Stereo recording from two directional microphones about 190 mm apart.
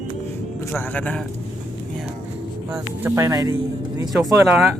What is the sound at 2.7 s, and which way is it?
Speech, 15° right (ahead or behind).